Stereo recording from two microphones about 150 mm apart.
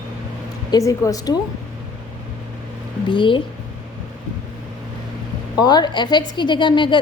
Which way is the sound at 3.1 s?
35° left (ahead or behind).